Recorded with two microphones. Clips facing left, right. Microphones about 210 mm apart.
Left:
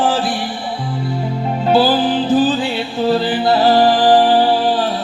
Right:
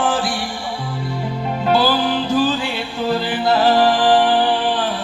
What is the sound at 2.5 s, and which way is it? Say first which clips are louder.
Music: left 4 dB; 40° left (ahead or behind).